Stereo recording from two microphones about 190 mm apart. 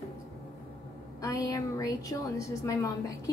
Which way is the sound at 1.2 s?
15° left (ahead or behind).